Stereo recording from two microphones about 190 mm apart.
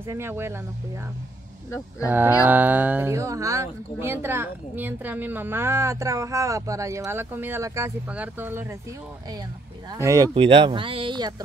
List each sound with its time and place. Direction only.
0.0 s speech: 15° right (ahead or behind)
2.0 s speech: 10° right (ahead or behind)
9.8 s speech: 15° right (ahead or behind)
10.3 s speech: 30° right (ahead or behind)